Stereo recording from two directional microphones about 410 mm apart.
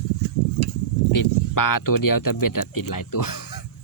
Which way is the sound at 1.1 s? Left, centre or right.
Left.